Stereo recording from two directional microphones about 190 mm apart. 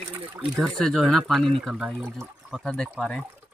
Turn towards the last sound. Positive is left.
turn(degrees=0)  # may be behind; listen again after turning